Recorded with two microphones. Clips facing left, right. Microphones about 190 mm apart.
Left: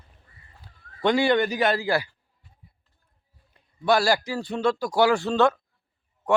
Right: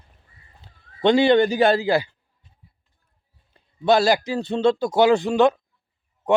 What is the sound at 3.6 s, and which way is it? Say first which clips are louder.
A man's voice: right 4 dB; 25° right (ahead or behind).